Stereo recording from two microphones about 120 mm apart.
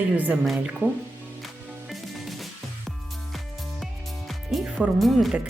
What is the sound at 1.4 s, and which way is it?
Music, centre (ahead or behind).